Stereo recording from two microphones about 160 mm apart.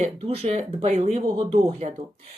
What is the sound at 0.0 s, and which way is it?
Speech, 40° right (ahead or behind).